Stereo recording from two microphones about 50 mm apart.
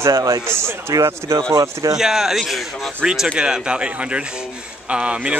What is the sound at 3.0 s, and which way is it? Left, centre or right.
Speech, centre.